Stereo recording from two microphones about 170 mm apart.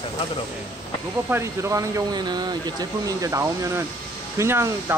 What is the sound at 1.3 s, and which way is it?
A man's voice, 15° right (ahead or behind).